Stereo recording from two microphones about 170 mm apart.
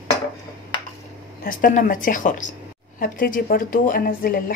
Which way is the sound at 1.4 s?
55° left (ahead or behind).